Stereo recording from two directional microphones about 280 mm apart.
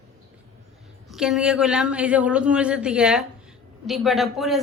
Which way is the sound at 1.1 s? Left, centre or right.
Centre.